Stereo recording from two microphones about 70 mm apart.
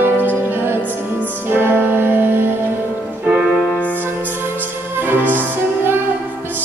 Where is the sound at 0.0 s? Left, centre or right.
Right.